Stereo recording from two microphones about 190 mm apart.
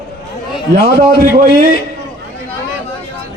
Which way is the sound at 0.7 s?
55° right (ahead or behind).